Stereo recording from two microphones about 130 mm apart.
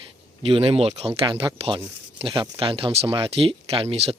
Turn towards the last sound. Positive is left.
turn(degrees=-55)  # may be behind; listen again after turning